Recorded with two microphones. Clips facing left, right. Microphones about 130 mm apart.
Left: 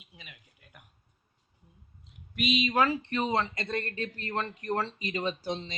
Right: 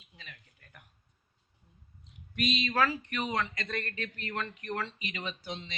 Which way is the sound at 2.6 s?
20° left (ahead or behind).